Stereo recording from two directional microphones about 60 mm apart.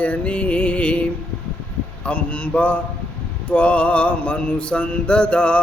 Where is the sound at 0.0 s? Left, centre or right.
Left.